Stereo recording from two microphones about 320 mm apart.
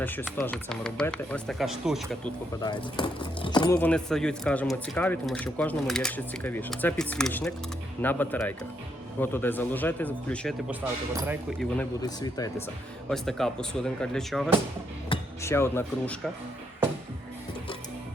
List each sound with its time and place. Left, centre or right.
0.0 s speech: centre
2.6 s speech: centre
11.8 s speech: centre